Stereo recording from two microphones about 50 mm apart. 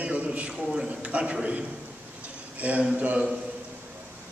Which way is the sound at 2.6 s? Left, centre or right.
Right.